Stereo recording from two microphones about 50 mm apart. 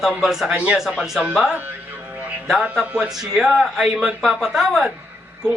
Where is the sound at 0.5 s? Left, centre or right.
Right.